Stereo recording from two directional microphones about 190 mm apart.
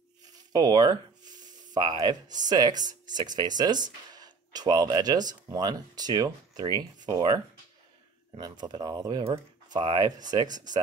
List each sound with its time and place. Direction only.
0.5 s speech: 20° right (ahead or behind)